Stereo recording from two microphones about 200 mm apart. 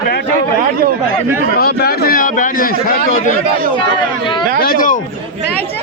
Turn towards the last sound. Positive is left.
turn(degrees=45)  # may be behind; listen again after turning